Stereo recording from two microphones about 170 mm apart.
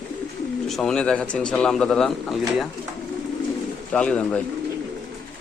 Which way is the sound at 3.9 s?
5° left (ahead or behind).